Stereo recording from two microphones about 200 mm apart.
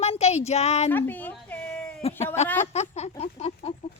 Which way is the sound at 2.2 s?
35° left (ahead or behind).